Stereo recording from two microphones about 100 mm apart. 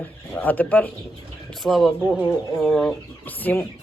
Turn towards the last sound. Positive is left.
turn(degrees=15)  # may be behind; listen again after turning